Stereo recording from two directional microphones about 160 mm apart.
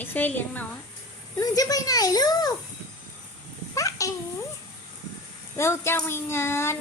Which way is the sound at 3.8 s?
20° left (ahead or behind).